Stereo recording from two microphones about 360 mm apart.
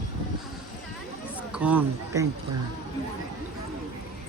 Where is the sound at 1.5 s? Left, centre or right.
Centre.